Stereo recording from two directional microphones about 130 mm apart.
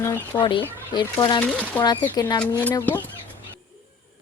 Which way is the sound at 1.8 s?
30° left (ahead or behind).